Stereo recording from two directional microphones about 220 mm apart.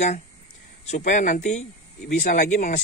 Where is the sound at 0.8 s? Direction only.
35° left (ahead or behind).